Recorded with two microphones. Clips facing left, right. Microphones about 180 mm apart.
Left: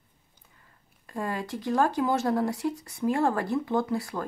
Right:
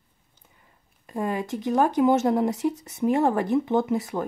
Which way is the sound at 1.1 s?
20° right (ahead or behind).